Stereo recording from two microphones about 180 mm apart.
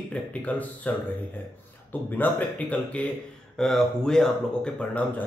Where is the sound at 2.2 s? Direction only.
10° left (ahead or behind).